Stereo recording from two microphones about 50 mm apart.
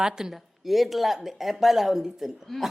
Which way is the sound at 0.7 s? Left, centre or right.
Centre.